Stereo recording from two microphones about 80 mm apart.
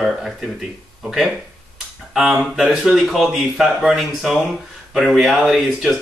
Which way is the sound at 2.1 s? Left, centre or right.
Centre.